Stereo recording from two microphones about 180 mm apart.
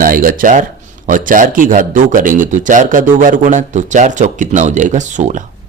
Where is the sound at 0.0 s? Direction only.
50° right (ahead or behind).